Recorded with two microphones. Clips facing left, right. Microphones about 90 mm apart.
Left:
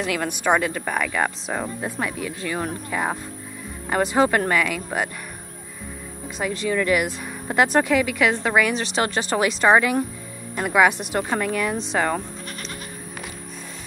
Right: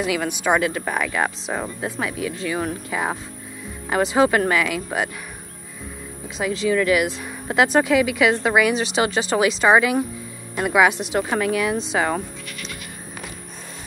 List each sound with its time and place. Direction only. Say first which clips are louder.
0.0 s a woman's voice: right 1 dB; centre (ahead or behind)
6.6 s a woman's voice: right 3 dB; centre (ahead or behind)
12.4 s goat: left 1 dB; 40° left (ahead or behind)